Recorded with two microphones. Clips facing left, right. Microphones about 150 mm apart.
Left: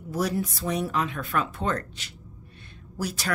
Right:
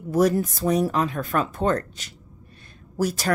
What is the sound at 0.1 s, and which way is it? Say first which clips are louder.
A woman's voice: right 7 dB; 50° right (ahead or behind).